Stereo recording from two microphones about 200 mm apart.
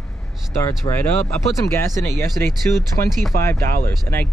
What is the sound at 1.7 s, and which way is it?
Speech, 15° left (ahead or behind).